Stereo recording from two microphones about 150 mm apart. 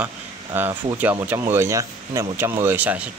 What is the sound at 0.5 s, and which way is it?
Speech, 15° right (ahead or behind).